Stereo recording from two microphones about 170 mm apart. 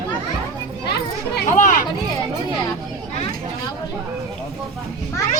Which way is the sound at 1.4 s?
50° left (ahead or behind).